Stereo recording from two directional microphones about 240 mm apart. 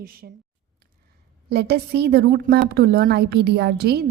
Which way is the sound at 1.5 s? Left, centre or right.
Right.